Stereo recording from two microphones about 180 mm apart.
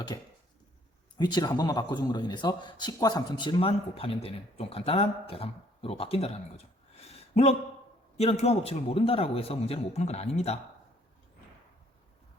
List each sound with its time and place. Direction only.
0.1 s a man's voice: 25° left (ahead or behind)
6.9 s a sound: 35° left (ahead or behind)
8.2 s a man's voice: 35° left (ahead or behind)